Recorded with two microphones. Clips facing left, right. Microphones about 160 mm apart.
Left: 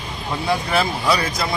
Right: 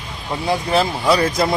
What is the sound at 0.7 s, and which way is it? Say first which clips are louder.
Speech: right 5 dB; 25° right (ahead or behind).